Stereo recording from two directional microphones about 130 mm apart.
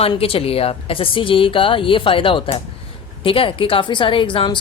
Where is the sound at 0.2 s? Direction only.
45° left (ahead or behind).